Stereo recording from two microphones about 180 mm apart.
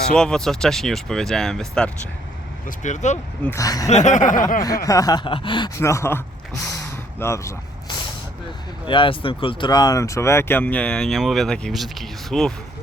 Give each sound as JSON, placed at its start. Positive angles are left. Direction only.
{"t": 0.1, "sound": "speech", "side_deg": 5}
{"t": 2.6, "sound": "speech", "side_deg": 40}
{"t": 3.4, "sound": "speech", "side_deg": 15}
{"t": 3.8, "sound": "chuckle", "side_deg": 40}
{"t": 4.6, "sound": "speech", "side_deg": 20}
{"t": 6.7, "sound": "a sound", "side_deg": 15}
{"t": 8.9, "sound": "speech", "side_deg": 30}